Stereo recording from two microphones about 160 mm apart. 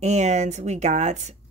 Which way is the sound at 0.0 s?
45° right (ahead or behind).